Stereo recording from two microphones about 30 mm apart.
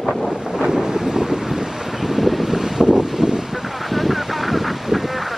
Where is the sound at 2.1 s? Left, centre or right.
Centre.